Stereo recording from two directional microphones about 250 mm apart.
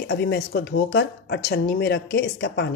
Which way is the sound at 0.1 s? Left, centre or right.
Left.